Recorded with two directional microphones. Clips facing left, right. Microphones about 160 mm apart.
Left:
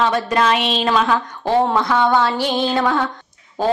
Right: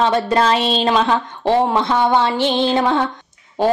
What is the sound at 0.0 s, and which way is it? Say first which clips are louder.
Speech: right 2 dB; 30° right (ahead or behind).